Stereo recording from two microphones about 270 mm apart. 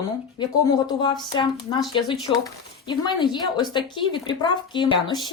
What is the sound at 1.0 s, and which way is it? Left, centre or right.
Speech, centre.